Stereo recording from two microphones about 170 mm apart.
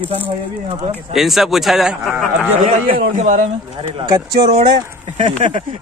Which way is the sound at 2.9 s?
50° right (ahead or behind).